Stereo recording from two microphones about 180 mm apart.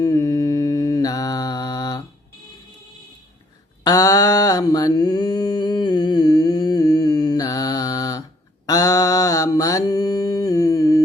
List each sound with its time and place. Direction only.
0.0 s mantra: 20° left (ahead or behind)
3.8 s mantra: 20° left (ahead or behind)